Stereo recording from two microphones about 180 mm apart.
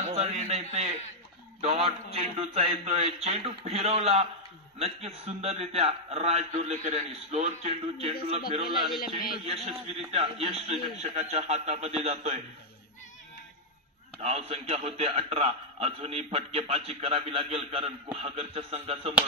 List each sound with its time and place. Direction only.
0.0 s a man's voice: 35° right (ahead or behind)
9.7 s a man's voice: 35° right (ahead or behind)
14.2 s a man's voice: 35° right (ahead or behind)